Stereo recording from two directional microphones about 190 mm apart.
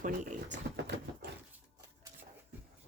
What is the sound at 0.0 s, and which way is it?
Speech, 45° right (ahead or behind).